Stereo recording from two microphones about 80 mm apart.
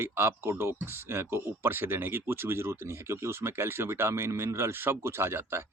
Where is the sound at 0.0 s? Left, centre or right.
Right.